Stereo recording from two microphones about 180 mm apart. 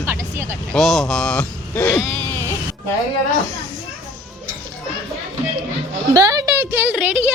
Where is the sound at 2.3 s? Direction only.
15° left (ahead or behind).